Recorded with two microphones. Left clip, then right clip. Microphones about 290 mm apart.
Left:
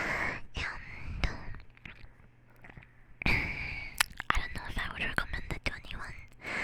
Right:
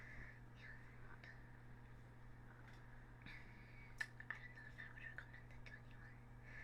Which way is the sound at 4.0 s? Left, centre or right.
Left.